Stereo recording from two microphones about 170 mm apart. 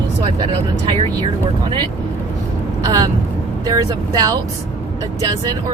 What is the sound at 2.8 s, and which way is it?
Speech, 20° right (ahead or behind).